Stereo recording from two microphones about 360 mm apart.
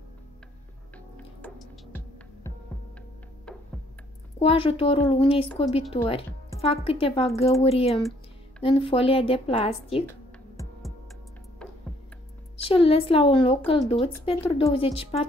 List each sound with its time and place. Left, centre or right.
0.9 s music: centre
3.5 s music: centre
4.4 s speech: centre
11.6 s music: centre
12.6 s speech: centre